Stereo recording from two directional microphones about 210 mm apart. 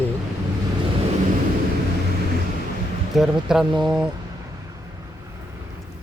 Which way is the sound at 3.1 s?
Centre (ahead or behind).